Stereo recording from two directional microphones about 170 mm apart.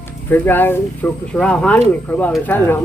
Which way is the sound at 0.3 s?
10° left (ahead or behind).